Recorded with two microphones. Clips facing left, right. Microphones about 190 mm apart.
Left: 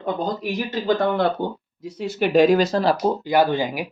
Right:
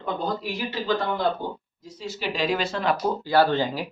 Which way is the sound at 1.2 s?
65° left (ahead or behind).